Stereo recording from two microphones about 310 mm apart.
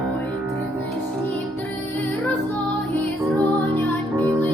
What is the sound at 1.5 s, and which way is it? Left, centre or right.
Music, centre.